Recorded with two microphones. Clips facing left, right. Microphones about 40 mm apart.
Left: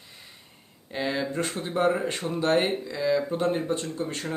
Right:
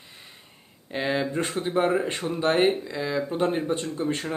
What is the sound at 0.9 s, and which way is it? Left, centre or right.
Speech, centre.